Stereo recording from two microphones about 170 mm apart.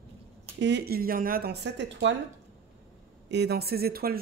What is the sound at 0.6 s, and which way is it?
A woman's voice, 90° right.